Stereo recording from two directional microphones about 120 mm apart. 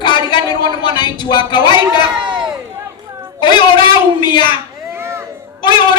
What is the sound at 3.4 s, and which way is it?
A man's voice, 40° left (ahead or behind).